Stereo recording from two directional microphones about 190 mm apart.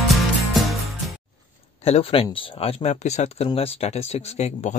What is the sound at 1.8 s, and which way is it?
Speech, 30° left (ahead or behind).